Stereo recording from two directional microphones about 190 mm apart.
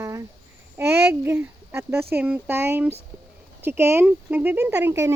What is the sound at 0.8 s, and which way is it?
Speech, 15° right (ahead or behind).